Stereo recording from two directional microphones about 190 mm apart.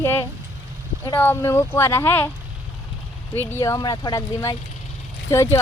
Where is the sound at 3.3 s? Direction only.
10° left (ahead or behind).